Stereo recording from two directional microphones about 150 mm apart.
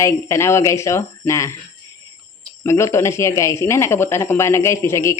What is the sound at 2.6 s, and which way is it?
Speech, 20° left (ahead or behind).